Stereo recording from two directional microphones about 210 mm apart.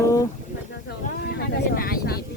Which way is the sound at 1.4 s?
45° left (ahead or behind).